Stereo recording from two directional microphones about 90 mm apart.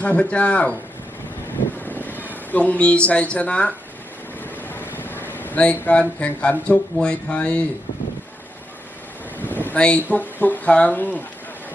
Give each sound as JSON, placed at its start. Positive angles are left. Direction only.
{"t": 0.0, "sound": "speech", "side_deg": 15}
{"t": 1.8, "sound": "speech", "side_deg": 20}
{"t": 9.4, "sound": "vehicle", "side_deg": 20}
{"t": 10.1, "sound": "speech", "side_deg": 20}